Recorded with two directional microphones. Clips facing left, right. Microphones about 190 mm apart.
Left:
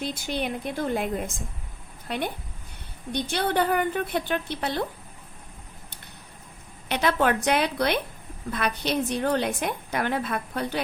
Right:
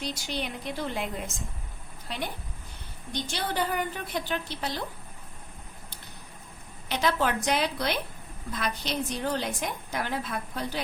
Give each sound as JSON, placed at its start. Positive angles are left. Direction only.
{"t": 0.0, "sound": "a woman's voice", "side_deg": 55}
{"t": 6.8, "sound": "a woman's voice", "side_deg": 60}